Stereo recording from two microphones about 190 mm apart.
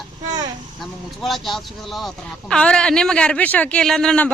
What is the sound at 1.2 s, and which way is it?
Speech, centre (ahead or behind).